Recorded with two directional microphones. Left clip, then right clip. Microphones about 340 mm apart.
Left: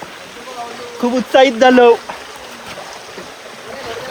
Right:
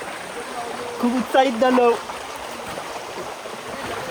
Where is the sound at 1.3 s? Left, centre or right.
Left.